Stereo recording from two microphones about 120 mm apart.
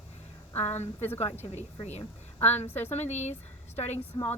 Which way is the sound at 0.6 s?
65° left (ahead or behind).